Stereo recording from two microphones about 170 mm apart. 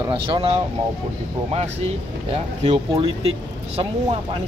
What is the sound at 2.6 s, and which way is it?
Speech, 35° right (ahead or behind).